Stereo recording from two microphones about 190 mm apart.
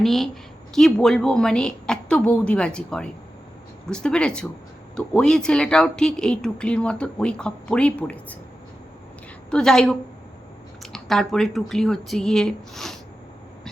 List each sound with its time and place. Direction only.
0.0 s speech: centre (ahead or behind)
9.5 s speech: 5° left (ahead or behind)